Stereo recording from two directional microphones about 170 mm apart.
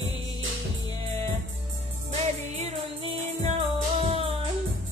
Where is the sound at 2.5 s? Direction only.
40° right (ahead or behind).